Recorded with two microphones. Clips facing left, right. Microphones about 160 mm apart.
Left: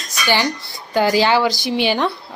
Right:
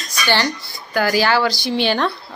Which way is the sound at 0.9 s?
25° left (ahead or behind).